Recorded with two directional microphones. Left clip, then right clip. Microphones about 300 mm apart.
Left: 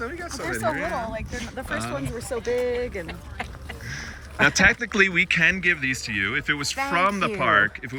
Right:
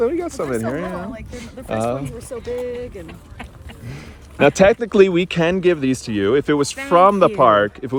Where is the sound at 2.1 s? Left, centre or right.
Left.